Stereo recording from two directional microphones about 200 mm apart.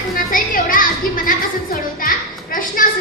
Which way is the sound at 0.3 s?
45° left (ahead or behind).